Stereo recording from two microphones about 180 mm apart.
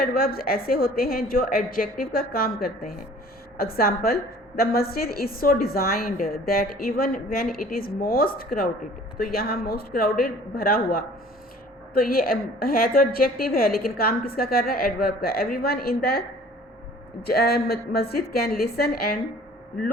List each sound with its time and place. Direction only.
0.0 s a woman's voice: 55° left (ahead or behind)
17.2 s a woman's voice: 60° left (ahead or behind)